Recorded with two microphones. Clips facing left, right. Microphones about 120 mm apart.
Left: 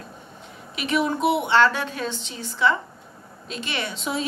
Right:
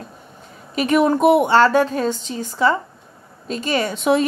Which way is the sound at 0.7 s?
50° right (ahead or behind).